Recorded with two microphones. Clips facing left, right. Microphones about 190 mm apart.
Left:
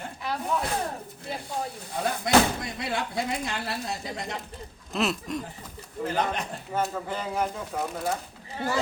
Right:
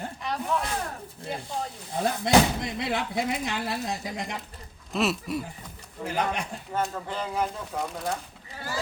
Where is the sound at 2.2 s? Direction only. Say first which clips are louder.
Even; 20° right (ahead or behind).